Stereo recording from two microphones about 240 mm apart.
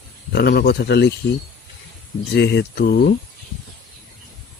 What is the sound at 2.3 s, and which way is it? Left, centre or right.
Mantra, left.